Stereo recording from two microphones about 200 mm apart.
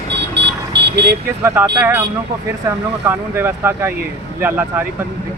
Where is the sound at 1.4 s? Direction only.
10° right (ahead or behind).